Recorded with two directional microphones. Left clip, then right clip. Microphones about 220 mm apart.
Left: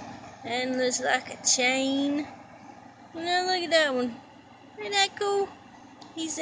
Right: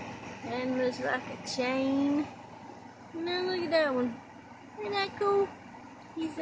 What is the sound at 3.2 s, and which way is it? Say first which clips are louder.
Speech: left 6 dB; 5° right (ahead or behind).